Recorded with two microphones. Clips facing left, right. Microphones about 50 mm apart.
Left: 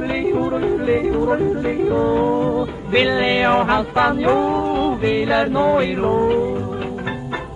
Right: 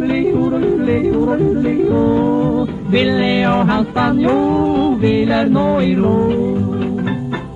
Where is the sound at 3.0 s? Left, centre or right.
Left.